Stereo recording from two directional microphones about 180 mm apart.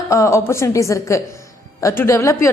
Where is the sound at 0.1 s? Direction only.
15° left (ahead or behind).